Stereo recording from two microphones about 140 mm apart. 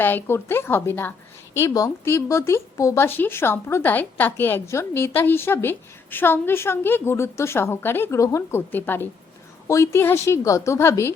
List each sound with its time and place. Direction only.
0.0 s a woman's voice: 15° left (ahead or behind)